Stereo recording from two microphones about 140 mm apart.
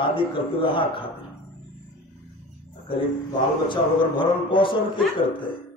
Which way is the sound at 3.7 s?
35° left (ahead or behind).